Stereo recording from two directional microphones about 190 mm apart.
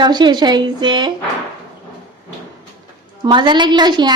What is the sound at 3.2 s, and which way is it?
Speech, 25° right (ahead or behind).